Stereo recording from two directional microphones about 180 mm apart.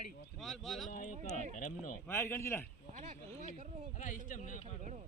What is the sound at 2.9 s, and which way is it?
Speech, 40° right (ahead or behind).